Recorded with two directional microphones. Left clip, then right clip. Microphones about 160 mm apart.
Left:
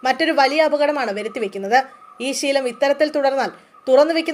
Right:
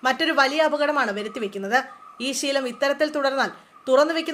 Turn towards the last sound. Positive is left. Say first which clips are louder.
# left 5 dB
turn(degrees=5)  # may be behind; listen again after turning